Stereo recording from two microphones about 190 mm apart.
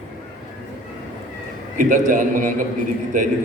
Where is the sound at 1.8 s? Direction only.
45° right (ahead or behind).